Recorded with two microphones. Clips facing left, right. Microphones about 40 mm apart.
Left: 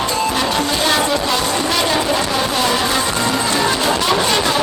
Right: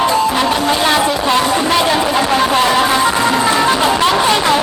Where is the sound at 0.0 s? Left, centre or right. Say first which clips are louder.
Right 5 dB; centre.